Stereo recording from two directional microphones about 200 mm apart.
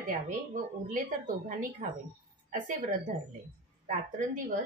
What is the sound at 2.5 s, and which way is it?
Speech, 40° right (ahead or behind).